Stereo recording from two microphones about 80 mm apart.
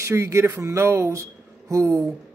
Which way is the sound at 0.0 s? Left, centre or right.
Right.